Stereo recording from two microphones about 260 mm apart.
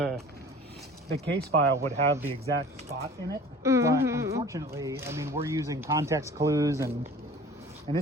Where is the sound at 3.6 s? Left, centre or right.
Centre.